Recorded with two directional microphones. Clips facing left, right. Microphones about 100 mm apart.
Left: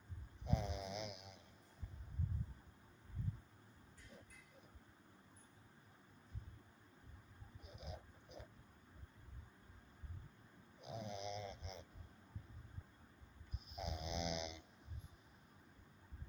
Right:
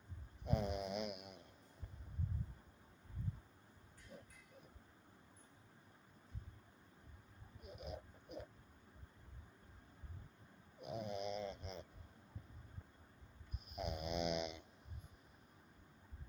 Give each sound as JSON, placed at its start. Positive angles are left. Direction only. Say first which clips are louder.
{"t": 0.4, "sound": "snoring", "louder": "right 3 dB", "side_deg": -55}
{"t": 7.8, "sound": "a sound", "louder": "right 4 dB", "side_deg": -55}
{"t": 10.8, "sound": "snoring", "louder": "right 4 dB", "side_deg": -50}
{"t": 13.7, "sound": "snoring", "louder": "right 3 dB", "side_deg": -55}